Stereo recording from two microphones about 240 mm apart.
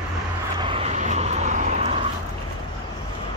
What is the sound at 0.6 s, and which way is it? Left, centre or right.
Vehicle, right.